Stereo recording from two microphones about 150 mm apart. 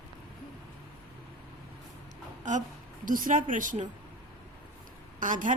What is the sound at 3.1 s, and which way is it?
Speech, 65° right (ahead or behind).